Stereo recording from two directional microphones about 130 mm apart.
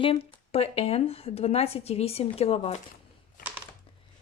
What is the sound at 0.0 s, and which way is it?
Speech, 45° left (ahead or behind).